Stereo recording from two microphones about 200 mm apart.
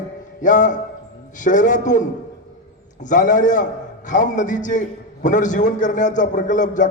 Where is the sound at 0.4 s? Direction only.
40° left (ahead or behind).